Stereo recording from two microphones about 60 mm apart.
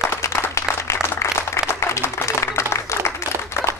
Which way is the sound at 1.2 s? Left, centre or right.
Left.